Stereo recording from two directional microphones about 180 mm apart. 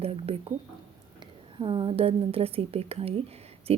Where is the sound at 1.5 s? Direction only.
25° right (ahead or behind).